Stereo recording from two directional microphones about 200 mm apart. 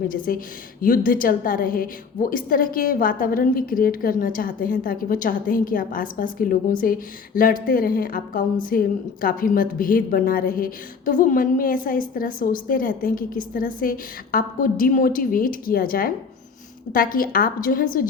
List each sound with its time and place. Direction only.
0.1 s a woman's voice: 45° left (ahead or behind)